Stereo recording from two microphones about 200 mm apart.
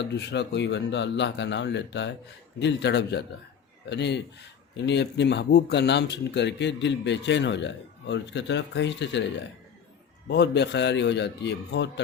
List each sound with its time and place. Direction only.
0.0 s a man's voice: 60° left (ahead or behind)
10.2 s a man's voice: 55° left (ahead or behind)